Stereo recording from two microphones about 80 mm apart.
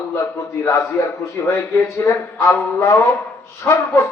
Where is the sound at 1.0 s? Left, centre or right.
Left.